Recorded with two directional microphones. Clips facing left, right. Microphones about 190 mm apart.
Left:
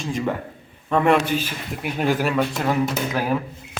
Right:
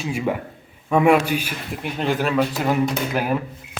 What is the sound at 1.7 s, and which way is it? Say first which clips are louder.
A man's voice: left 1 dB; 5° left (ahead or behind).